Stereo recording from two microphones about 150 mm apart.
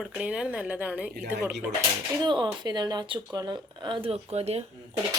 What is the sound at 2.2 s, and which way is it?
Speech, 30° right (ahead or behind).